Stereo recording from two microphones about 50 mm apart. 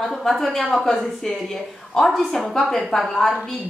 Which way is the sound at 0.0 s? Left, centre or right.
Centre.